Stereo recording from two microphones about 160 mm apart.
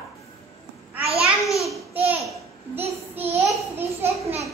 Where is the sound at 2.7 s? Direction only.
10° right (ahead or behind).